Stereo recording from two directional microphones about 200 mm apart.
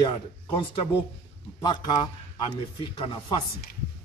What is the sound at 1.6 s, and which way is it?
Speech, 20° left (ahead or behind).